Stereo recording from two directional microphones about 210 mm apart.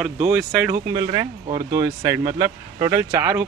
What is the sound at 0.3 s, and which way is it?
Speech, 5° right (ahead or behind).